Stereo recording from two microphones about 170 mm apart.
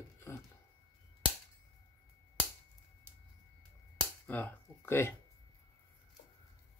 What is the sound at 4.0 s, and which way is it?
Cap gun, 10° left (ahead or behind).